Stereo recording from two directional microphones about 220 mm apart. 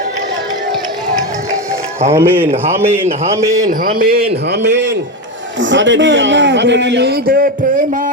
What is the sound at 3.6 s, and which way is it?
A man's voice, 40° right (ahead or behind).